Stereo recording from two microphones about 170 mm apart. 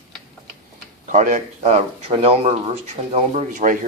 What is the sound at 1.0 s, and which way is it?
Speech, 45° right (ahead or behind).